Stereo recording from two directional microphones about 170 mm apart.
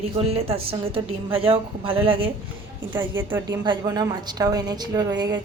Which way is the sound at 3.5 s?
25° right (ahead or behind).